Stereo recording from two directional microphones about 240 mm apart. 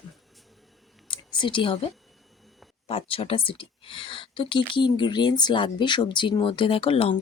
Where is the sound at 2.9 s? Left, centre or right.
Left.